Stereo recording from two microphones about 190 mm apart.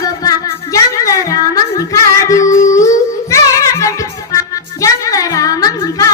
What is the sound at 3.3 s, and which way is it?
Music, 15° left (ahead or behind).